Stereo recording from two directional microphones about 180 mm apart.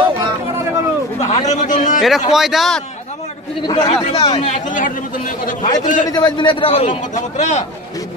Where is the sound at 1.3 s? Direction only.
40° left (ahead or behind).